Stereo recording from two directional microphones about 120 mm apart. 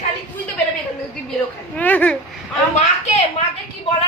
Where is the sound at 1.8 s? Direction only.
15° left (ahead or behind).